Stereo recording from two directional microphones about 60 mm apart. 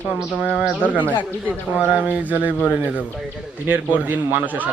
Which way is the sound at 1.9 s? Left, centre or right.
Right.